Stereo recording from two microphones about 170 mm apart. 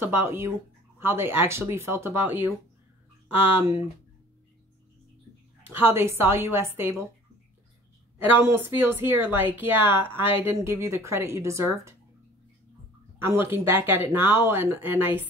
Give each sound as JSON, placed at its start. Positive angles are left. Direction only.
{"t": 0.0, "sound": "a woman's voice", "side_deg": -15}
{"t": 5.7, "sound": "a woman's voice", "side_deg": -15}
{"t": 8.3, "sound": "a woman's voice", "side_deg": -10}
{"t": 13.2, "sound": "a woman's voice", "side_deg": -15}